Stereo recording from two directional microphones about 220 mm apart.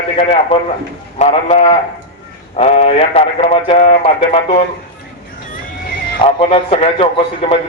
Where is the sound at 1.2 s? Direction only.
30° left (ahead or behind).